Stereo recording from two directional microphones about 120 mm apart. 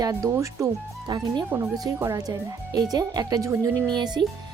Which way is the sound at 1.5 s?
25° right (ahead or behind).